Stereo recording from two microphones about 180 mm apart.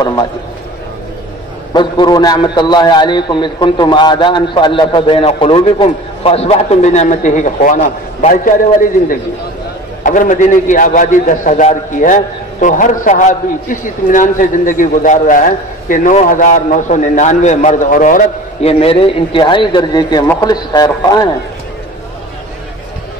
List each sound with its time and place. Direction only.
0.0 s a man's voice: 25° left (ahead or behind)
1.7 s a man's voice: 25° left (ahead or behind); by 8.5 s 45° left (ahead or behind)
10.0 s a man's voice: 45° left (ahead or behind); by 21.3 s 20° left (ahead or behind)